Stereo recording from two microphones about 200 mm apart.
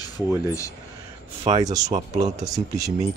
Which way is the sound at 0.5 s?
15° left (ahead or behind).